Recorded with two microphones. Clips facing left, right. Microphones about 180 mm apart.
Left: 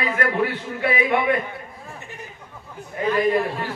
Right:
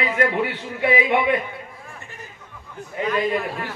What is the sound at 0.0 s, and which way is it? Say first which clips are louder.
A man's voice: right 1 dB; 20° right (ahead or behind).